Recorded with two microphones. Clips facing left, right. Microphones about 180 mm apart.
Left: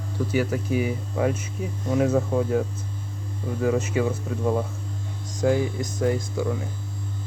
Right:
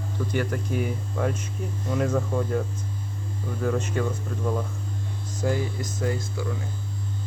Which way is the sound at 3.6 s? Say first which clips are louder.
Left 3 dB; 5° left (ahead or behind).